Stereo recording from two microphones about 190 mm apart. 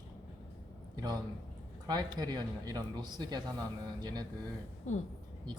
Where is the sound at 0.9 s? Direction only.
20° right (ahead or behind).